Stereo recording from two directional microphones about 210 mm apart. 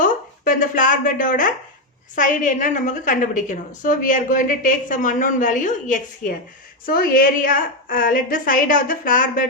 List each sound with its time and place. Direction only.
0.0 s a woman's voice: 40° left (ahead or behind)